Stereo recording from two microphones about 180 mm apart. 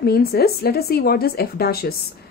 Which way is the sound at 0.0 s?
60° left (ahead or behind).